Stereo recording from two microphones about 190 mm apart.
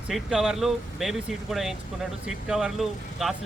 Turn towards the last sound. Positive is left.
turn(degrees=0)  # may be behind; listen again after turning